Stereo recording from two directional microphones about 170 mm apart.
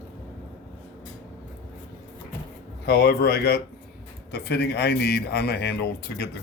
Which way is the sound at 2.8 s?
65° left (ahead or behind).